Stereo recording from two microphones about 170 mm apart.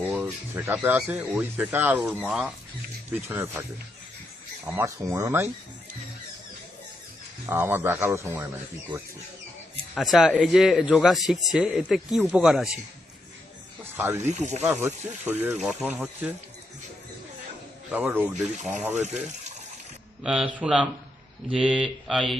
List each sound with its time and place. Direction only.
0.5 s speech: 15° right (ahead or behind)
3.1 s speech: 15° right (ahead or behind)
4.6 s speech: 15° right (ahead or behind)
7.4 s speech: 15° right (ahead or behind)
9.9 s speech: centre (ahead or behind)
13.9 s speech: 15° right (ahead or behind)
14.3 s speech: 45° right (ahead or behind)
14.6 s speech: 10° right (ahead or behind)
17.9 s speech: 10° right (ahead or behind)
20.2 s speech: 5° right (ahead or behind)